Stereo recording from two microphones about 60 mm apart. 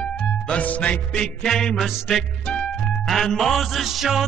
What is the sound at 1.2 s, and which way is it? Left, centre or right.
Music, centre.